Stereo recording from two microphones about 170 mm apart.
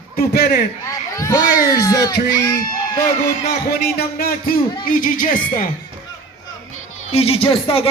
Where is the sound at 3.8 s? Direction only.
65° left (ahead or behind).